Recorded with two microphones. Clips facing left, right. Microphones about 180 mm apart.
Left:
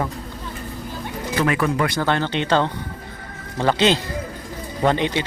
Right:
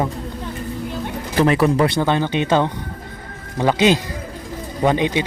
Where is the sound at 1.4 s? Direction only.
30° right (ahead or behind).